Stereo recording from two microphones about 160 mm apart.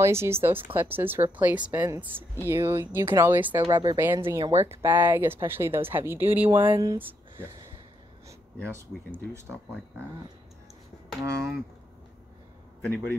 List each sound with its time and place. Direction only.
0.0 s speech: 15° right (ahead or behind)
8.6 s speech: 15° right (ahead or behind)
11.1 s speech: 15° right (ahead or behind)